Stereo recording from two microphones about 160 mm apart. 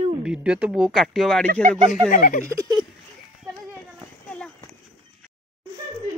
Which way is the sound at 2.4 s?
20° right (ahead or behind).